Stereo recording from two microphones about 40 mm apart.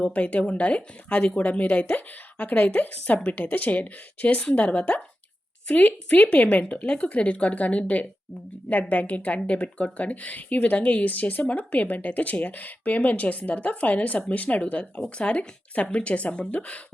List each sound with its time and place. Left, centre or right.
0.1 s a woman's voice: left
4.5 s speech: left